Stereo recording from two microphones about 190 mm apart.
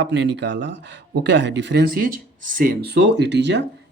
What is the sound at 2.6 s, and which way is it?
Speech, 55° right (ahead or behind).